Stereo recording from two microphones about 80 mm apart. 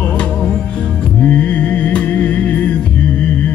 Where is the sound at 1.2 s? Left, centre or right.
Centre.